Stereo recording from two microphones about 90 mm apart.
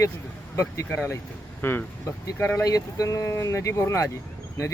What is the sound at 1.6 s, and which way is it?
Speech, 20° left (ahead or behind).